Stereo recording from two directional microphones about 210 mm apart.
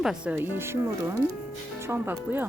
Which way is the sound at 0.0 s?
5° right (ahead or behind).